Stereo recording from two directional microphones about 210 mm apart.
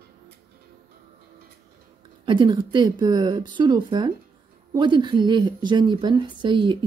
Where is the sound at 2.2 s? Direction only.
20° right (ahead or behind).